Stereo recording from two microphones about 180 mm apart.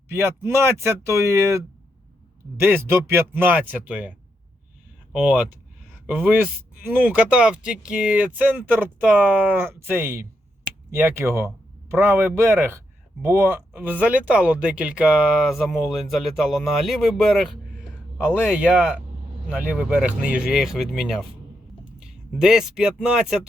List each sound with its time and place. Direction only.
0.1 s speech: 15° right (ahead or behind)
5.1 s speech: 5° right (ahead or behind)
22.3 s speech: 5° right (ahead or behind)